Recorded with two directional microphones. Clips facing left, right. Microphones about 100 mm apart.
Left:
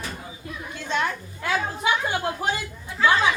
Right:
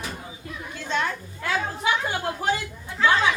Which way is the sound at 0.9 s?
15° left (ahead or behind).